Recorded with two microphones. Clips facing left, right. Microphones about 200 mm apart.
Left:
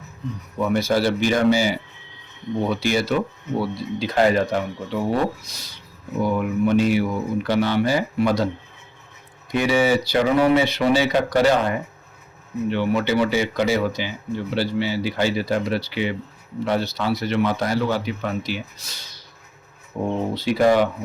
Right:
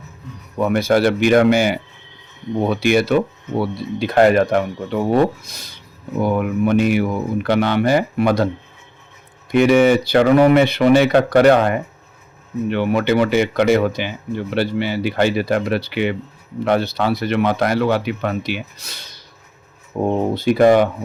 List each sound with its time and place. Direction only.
0.7 s speech: 60° right (ahead or behind)
9.5 s speech: 60° right (ahead or behind)
20.1 s speech: 50° right (ahead or behind)